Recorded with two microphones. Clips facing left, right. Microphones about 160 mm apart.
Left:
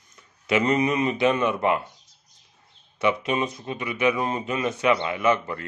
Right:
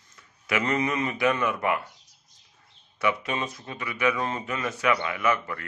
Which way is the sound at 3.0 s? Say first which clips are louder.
Left 4 dB; 20° left (ahead or behind).